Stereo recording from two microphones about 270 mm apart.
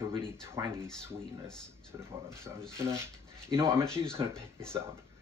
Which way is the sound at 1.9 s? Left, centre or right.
Centre.